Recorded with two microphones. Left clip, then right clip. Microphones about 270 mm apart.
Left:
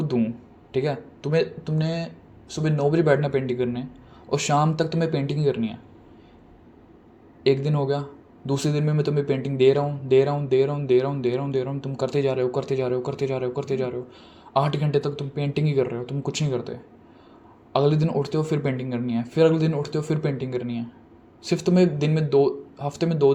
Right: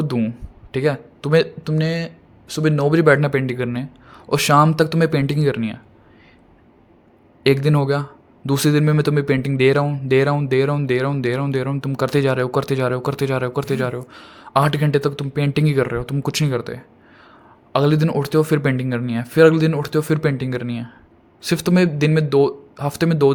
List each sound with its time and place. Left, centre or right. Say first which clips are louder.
0.0 s speech: right 2 dB; right
7.4 s speech: right 5 dB; right